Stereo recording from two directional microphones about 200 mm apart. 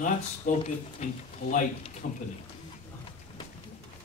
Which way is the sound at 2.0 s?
50° left (ahead or behind).